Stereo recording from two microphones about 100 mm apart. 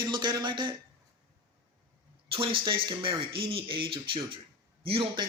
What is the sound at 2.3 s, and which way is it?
Speech, 60° right (ahead or behind).